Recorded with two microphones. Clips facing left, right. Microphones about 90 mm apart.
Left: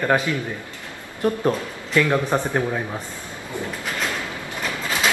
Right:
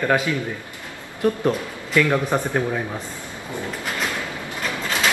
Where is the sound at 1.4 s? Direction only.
15° left (ahead or behind).